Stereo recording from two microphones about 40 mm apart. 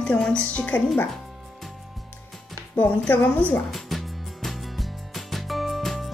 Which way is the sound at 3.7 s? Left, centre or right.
Centre.